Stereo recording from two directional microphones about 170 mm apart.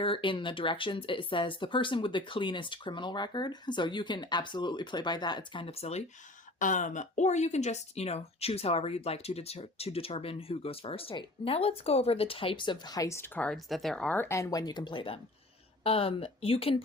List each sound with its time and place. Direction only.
0.0 s speech: 30° left (ahead or behind)
6.6 s speech: 50° left (ahead or behind)